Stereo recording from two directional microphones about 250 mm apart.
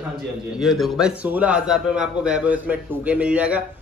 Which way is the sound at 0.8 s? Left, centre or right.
Centre.